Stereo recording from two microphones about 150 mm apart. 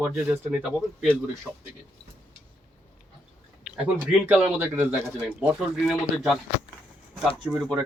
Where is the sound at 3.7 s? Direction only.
10° right (ahead or behind).